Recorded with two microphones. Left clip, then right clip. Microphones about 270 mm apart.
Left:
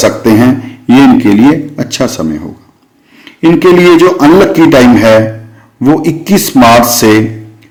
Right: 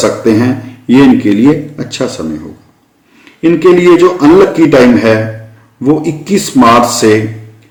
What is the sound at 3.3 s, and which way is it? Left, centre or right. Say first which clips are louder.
A man's voice: left 1 dB; left.